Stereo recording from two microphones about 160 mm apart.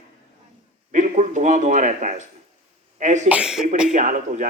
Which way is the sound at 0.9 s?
50° right (ahead or behind).